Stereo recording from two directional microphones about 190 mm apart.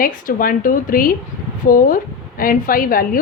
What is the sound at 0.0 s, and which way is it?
A woman's voice, 45° left (ahead or behind).